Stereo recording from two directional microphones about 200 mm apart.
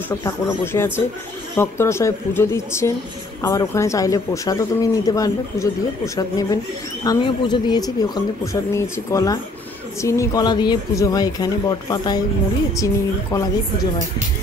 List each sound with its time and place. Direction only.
0.7 s speech: 10° left (ahead or behind)